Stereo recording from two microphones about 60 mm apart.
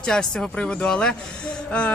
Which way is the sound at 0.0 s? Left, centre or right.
Centre.